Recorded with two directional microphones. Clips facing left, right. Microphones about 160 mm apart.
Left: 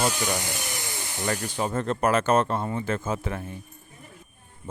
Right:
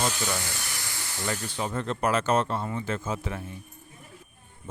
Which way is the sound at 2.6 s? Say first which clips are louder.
Left 3 dB; 40° left (ahead or behind).